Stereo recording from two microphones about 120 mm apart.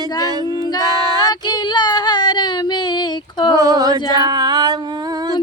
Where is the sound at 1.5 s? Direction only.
35° left (ahead or behind).